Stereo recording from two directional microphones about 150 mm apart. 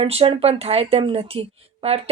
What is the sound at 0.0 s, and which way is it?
Speech, 40° right (ahead or behind).